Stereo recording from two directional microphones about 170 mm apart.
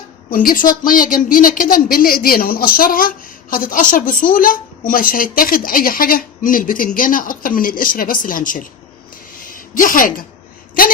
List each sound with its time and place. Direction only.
0.3 s a woman's voice: 55° left (ahead or behind)